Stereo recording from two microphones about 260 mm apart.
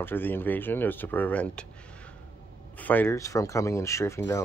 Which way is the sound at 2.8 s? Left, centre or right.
Centre.